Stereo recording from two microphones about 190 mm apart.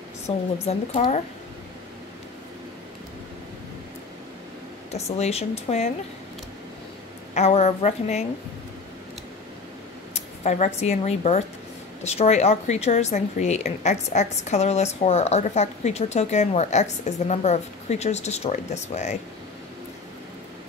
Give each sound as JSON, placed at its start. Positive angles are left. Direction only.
{"t": 0.3, "sound": "speech", "side_deg": 30}
{"t": 4.9, "sound": "a woman's voice", "side_deg": 35}
{"t": 7.3, "sound": "a woman's voice", "side_deg": 35}
{"t": 10.1, "sound": "a woman's voice", "side_deg": 40}